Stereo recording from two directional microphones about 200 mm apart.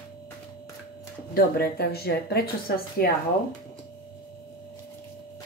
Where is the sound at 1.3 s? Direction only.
50° left (ahead or behind).